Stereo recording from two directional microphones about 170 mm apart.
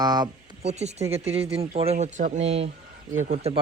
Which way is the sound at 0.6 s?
40° right (ahead or behind).